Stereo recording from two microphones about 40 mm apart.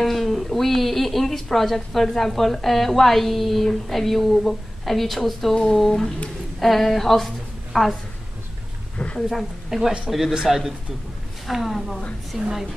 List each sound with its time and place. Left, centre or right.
0.0 s a woman's voice: centre
8.9 s a sound: left
9.7 s a man's voice: centre